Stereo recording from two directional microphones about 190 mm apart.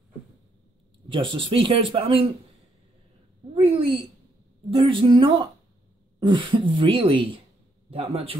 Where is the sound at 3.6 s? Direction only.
30° right (ahead or behind).